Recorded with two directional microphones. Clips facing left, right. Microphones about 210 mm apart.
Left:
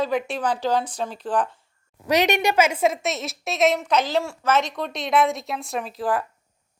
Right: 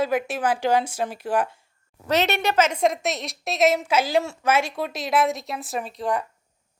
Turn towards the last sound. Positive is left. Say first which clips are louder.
# left 1 dB
turn(degrees=0)  # may be behind; listen again after turning